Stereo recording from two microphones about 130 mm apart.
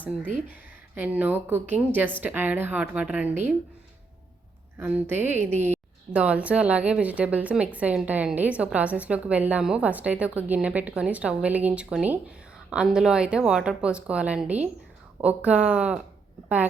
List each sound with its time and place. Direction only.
0.4 s a woman's voice: 15° right (ahead or behind)
4.8 s a woman's voice: 10° right (ahead or behind)